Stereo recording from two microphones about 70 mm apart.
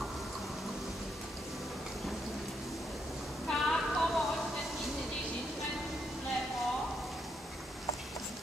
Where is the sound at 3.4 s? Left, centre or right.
Centre.